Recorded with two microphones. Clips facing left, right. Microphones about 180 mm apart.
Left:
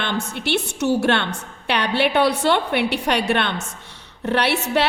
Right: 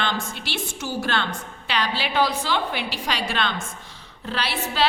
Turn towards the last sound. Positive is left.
turn(degrees=70)  # may be behind; listen again after turning